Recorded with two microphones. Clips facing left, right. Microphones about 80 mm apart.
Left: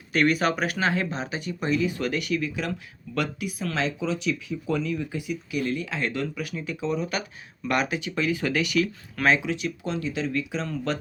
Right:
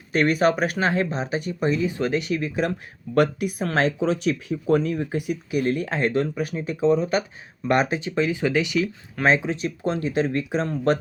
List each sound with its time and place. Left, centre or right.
0.1 s speech: right